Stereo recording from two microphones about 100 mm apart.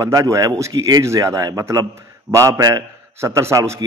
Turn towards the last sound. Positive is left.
turn(degrees=-30)  # may be behind; listen again after turning